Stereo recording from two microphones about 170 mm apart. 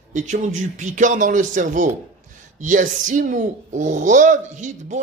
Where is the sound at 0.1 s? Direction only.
45° right (ahead or behind).